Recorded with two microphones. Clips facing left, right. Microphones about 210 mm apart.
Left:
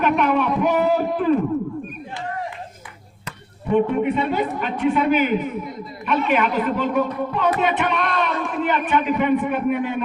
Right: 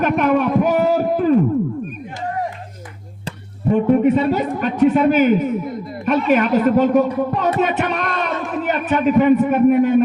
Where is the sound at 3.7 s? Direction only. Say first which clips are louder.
Right 4 dB; 45° right (ahead or behind).